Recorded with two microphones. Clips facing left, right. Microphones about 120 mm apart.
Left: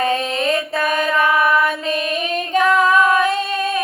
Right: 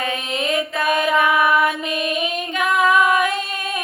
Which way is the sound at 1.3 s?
30° left (ahead or behind).